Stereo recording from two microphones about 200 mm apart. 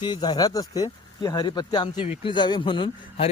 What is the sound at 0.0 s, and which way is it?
Speech, 20° left (ahead or behind).